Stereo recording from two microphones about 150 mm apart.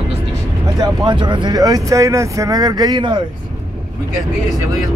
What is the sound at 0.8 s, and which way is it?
Speech, 30° right (ahead or behind).